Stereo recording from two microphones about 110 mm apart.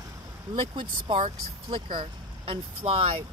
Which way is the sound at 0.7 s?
45° right (ahead or behind).